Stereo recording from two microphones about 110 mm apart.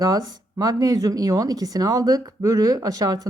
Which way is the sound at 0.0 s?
35° right (ahead or behind).